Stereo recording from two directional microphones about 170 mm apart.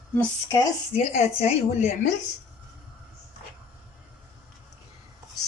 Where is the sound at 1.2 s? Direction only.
40° left (ahead or behind).